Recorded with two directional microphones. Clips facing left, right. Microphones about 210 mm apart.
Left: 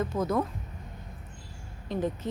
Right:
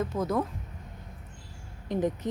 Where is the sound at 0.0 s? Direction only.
Centre (ahead or behind).